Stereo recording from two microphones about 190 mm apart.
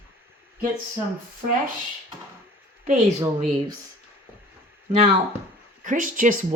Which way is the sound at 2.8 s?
40° right (ahead or behind).